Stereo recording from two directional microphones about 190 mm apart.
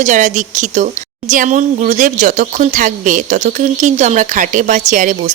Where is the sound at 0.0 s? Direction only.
40° right (ahead or behind).